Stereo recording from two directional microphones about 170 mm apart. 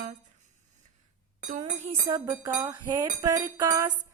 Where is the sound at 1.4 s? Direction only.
50° right (ahead or behind).